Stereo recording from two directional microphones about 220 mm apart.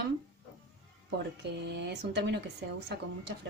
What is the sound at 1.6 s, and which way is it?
Speech, 50° right (ahead or behind).